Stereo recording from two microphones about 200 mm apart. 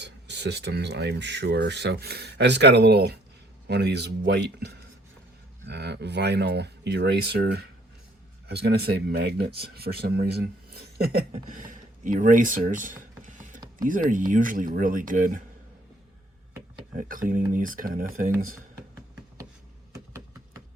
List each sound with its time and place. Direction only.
0.0 s speech: 60° right (ahead or behind)
11.5 s mechanisms: 40° right (ahead or behind)
13.7 s speech: 40° right (ahead or behind)
17.0 s speech: 45° right (ahead or behind)